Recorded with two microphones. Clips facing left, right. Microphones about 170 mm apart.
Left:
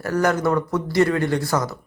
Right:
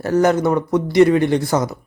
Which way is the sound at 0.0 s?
25° right (ahead or behind).